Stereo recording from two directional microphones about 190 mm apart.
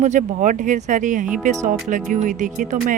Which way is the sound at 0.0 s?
40° right (ahead or behind).